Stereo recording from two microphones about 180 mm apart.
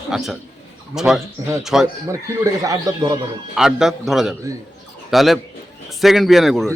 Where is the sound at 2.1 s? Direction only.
20° right (ahead or behind).